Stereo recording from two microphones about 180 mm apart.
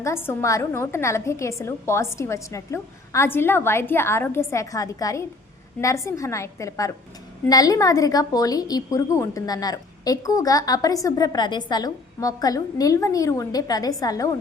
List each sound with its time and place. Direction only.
0.0 s a woman's voice: 15° left (ahead or behind)